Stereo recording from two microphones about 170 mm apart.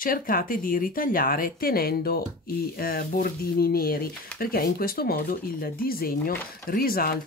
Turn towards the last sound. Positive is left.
turn(degrees=60)  # may be behind; listen again after turning